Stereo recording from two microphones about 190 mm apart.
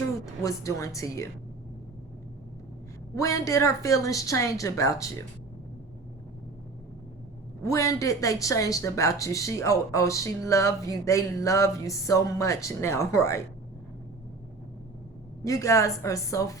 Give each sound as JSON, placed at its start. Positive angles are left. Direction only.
{"t": 0.2, "sound": "speech", "side_deg": 15}
{"t": 3.2, "sound": "speech", "side_deg": 15}
{"t": 7.6, "sound": "speech", "side_deg": 15}
{"t": 15.4, "sound": "speech", "side_deg": 15}